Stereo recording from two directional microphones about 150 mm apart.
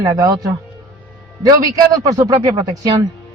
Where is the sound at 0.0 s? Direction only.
25° right (ahead or behind).